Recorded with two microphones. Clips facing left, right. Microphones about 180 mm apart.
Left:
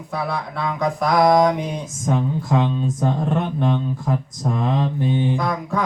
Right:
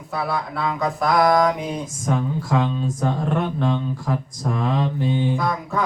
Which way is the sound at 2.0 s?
20° left (ahead or behind).